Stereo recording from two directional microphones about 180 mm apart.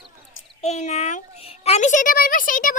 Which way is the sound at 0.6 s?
40° left (ahead or behind).